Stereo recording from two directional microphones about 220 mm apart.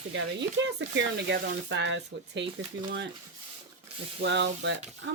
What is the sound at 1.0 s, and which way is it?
Speech, 50° right (ahead or behind).